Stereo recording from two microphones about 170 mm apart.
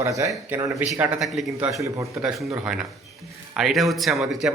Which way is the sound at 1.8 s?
20° right (ahead or behind).